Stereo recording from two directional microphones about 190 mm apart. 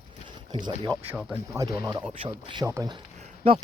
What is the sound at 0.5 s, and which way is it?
Speech, 25° right (ahead or behind).